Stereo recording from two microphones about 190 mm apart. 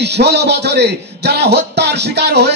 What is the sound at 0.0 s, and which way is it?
A man's voice, 60° right (ahead or behind).